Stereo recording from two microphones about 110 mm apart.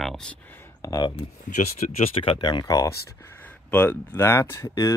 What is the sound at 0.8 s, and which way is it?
Speech, 35° left (ahead or behind).